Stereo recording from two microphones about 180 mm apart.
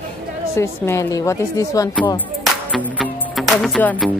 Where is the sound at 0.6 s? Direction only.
15° left (ahead or behind).